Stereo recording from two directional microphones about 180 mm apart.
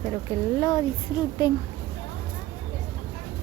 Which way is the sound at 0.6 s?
25° left (ahead or behind).